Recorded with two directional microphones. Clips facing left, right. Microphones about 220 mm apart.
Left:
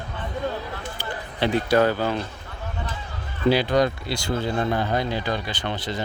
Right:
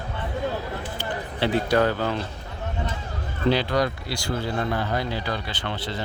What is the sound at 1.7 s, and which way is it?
Speech, 15° left (ahead or behind).